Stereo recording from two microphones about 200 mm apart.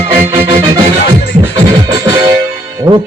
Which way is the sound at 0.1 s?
25° right (ahead or behind).